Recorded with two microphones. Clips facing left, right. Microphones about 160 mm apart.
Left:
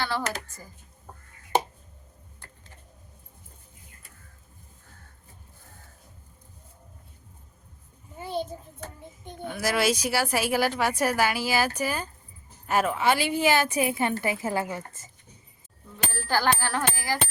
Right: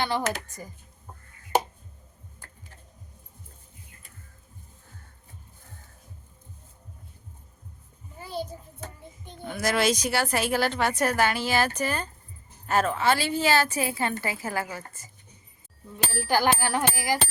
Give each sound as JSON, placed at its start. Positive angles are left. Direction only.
{"t": 0.0, "sound": "speech", "side_deg": -20}
{"t": 8.2, "sound": "speech", "side_deg": 20}
{"t": 9.6, "sound": "a woman's voice", "side_deg": 5}
{"t": 16.1, "sound": "speech", "side_deg": -15}